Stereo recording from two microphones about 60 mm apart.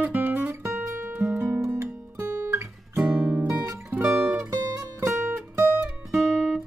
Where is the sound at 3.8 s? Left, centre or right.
Right.